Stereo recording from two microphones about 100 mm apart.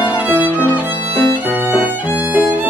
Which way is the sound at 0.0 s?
15° right (ahead or behind).